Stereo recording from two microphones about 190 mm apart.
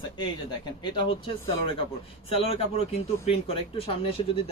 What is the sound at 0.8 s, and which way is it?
Speech, 25° left (ahead or behind).